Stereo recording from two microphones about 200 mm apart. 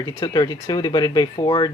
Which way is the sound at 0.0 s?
20° left (ahead or behind).